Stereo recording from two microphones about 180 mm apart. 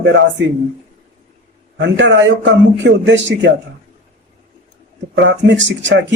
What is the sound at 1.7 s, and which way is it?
Speech, 75° right (ahead or behind).